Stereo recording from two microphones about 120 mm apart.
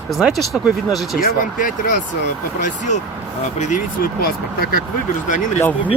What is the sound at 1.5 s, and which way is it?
Speech, 90° left.